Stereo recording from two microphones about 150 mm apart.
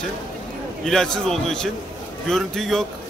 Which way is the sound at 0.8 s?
5° left (ahead or behind).